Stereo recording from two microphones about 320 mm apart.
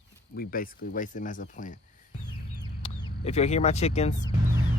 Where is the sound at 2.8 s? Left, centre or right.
Centre.